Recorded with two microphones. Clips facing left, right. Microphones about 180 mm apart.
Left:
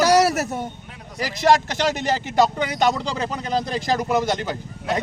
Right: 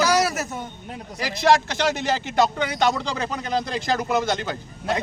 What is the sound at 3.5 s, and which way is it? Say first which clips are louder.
Speech: left 2 dB; 35° left (ahead or behind).